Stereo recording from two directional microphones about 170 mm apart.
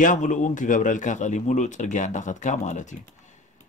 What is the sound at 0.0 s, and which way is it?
A man's voice, 50° left (ahead or behind).